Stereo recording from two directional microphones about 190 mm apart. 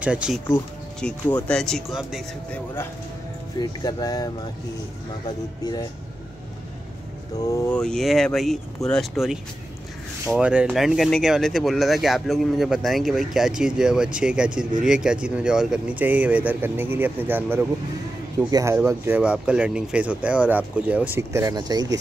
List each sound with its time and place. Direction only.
0.0 s speech: 5° right (ahead or behind)
1.0 s speech: 5° left (ahead or behind)
3.8 s speech: 20° left (ahead or behind)
7.4 s speech: 20° left (ahead or behind)
7.7 s speech: 5° left (ahead or behind); by 21.8 s 20° right (ahead or behind)